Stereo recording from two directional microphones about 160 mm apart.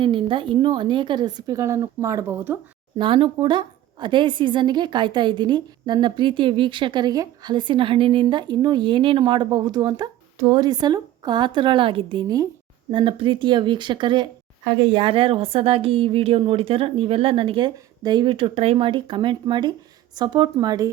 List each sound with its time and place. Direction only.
0.0 s a woman's voice: 30° right (ahead or behind); by 2.6 s 15° right (ahead or behind)
3.0 s a woman's voice: 30° right (ahead or behind)